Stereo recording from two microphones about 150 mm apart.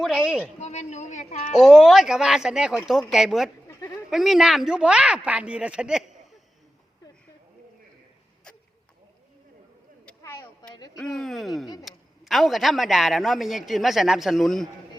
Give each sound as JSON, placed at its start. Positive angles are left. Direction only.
{"t": 0.0, "sound": "a man's voice", "side_deg": -5}
{"t": 0.6, "sound": "speech", "side_deg": 50}
{"t": 1.5, "sound": "a man's voice", "side_deg": 0}
{"t": 10.1, "sound": "a sound", "side_deg": 15}
{"t": 10.9, "sound": "a man's voice", "side_deg": 5}